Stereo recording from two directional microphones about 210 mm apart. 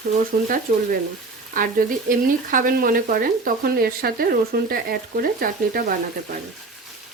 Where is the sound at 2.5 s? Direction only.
40° right (ahead or behind).